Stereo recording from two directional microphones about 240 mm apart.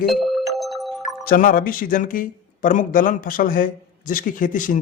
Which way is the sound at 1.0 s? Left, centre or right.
Left.